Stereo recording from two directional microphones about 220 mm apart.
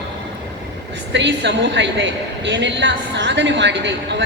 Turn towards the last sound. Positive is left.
turn(degrees=-55)  # may be behind; listen again after turning